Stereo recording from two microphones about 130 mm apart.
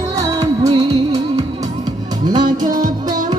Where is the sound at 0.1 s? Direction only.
30° right (ahead or behind).